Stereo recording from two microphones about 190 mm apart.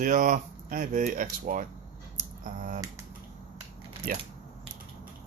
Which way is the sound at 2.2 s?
45° right (ahead or behind).